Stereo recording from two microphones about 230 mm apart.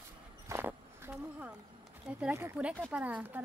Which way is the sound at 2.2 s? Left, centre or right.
Centre.